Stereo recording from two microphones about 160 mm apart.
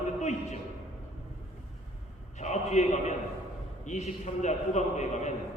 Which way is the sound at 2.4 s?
45° left (ahead or behind).